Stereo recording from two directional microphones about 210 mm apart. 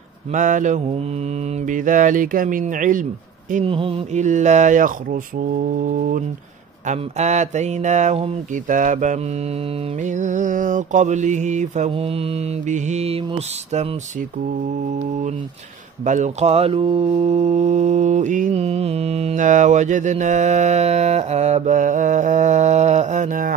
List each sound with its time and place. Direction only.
0.3 s speech: 35° right (ahead or behind)
3.5 s speech: 25° right (ahead or behind)
6.9 s speech: 35° right (ahead or behind)
16.1 s speech: 35° right (ahead or behind)